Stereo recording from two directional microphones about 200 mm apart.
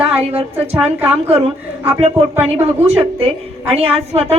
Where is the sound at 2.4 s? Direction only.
30° right (ahead or behind).